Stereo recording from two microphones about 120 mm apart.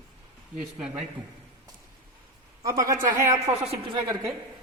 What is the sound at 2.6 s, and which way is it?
Speech, 25° right (ahead or behind).